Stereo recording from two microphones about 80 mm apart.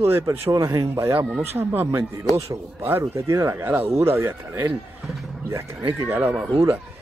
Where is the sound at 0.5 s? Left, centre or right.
Right.